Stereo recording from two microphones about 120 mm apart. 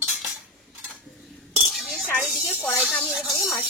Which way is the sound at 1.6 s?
5° right (ahead or behind).